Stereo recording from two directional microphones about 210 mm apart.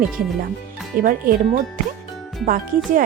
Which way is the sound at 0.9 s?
40° right (ahead or behind).